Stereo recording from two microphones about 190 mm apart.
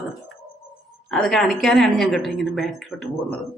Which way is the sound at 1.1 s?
Centre (ahead or behind).